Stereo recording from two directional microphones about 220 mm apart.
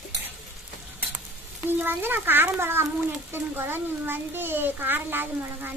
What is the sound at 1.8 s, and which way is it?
A child's voice, 10° right (ahead or behind).